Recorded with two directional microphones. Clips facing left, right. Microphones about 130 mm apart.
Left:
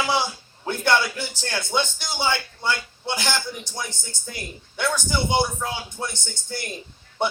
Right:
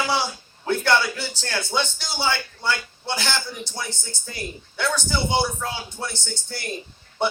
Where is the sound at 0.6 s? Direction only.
20° left (ahead or behind).